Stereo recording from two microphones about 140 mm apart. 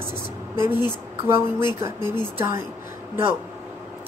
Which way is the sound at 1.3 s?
20° right (ahead or behind).